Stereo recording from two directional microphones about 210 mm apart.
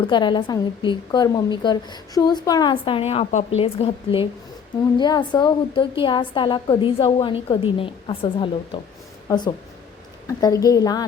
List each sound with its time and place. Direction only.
0.1 s a woman's voice: 20° left (ahead or behind)